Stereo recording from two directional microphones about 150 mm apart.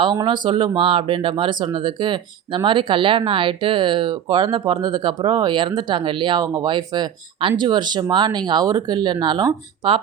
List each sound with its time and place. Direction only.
0.0 s speech: 30° right (ahead or behind)